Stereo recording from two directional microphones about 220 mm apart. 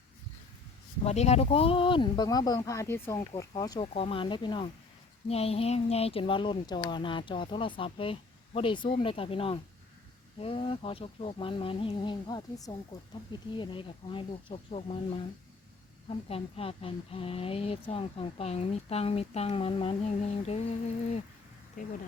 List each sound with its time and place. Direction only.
1.0 s speech: 30° left (ahead or behind)